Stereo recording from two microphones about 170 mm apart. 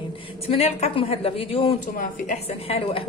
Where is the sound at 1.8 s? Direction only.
50° left (ahead or behind).